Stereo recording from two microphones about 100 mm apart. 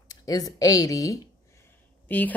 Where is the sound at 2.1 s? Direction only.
15° left (ahead or behind).